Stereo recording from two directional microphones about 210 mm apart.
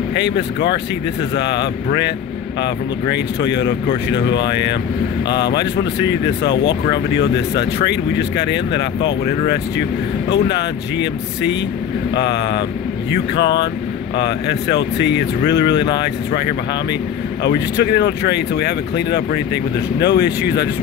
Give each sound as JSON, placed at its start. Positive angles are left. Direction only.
{"t": 0.1, "sound": "speech", "side_deg": 55}
{"t": 10.3, "sound": "speech", "side_deg": 55}